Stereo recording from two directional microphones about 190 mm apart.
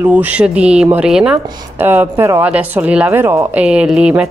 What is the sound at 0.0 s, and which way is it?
A woman's voice, 10° right (ahead or behind).